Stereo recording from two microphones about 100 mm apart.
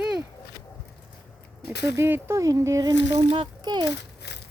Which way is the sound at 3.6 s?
45° right (ahead or behind).